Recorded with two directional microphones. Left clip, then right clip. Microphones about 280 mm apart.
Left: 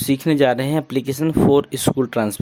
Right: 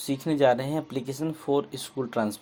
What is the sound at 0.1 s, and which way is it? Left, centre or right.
Speech, left.